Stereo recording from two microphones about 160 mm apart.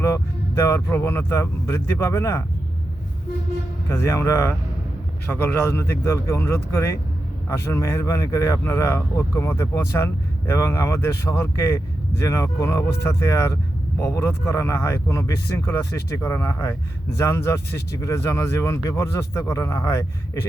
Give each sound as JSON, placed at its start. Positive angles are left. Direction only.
{"t": 0.0, "sound": "speech", "side_deg": 15}
{"t": 3.8, "sound": "speech", "side_deg": 15}